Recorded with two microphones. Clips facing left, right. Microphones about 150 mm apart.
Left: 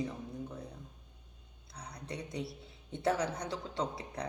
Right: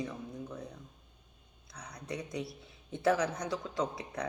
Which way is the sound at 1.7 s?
30° left (ahead or behind).